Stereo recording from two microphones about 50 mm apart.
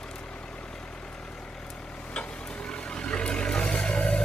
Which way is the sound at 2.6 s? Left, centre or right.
Centre.